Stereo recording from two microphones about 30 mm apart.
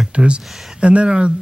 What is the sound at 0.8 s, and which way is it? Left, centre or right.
Speech, right.